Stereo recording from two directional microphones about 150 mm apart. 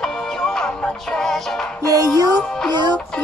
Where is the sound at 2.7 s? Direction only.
30° right (ahead or behind).